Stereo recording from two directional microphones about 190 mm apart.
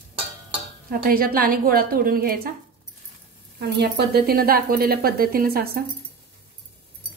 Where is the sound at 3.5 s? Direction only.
60° right (ahead or behind).